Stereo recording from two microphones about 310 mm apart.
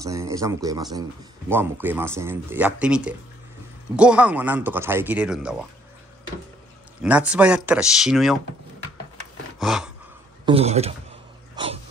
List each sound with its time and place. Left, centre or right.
0.0 s speech: centre
7.0 s speech: centre
9.6 s gasp: centre
10.4 s speech: centre
11.5 s a sound: centre